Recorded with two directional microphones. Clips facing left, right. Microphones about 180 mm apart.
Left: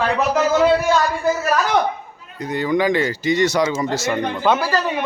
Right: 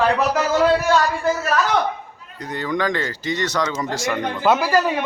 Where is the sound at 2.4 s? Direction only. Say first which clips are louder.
Left 4 dB; 10° left (ahead or behind).